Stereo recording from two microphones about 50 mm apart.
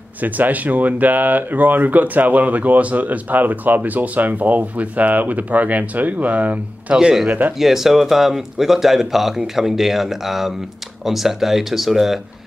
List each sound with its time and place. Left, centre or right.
0.2 s speech: right
7.0 s a man's voice: centre